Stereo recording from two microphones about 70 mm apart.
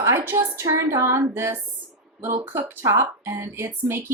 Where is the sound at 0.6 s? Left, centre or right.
Right.